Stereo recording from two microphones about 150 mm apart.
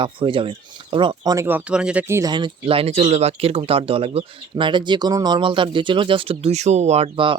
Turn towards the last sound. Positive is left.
turn(degrees=-35)  # may be behind; listen again after turning